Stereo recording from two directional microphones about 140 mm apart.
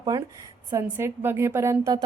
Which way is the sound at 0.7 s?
15° right (ahead or behind).